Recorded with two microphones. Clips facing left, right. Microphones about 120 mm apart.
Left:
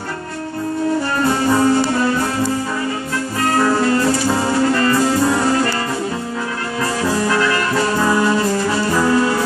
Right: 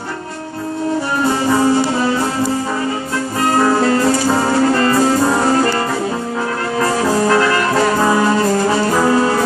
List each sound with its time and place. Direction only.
1.2 s music: 15° right (ahead or behind)
3.5 s music: 25° right (ahead or behind)
7.2 s brass instrument: 35° right (ahead or behind)